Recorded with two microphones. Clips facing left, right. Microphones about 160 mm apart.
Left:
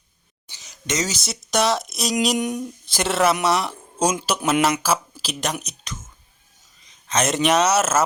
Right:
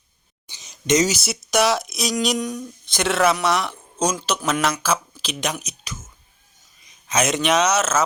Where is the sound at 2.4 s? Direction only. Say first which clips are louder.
Left 3 dB; 25° left (ahead or behind).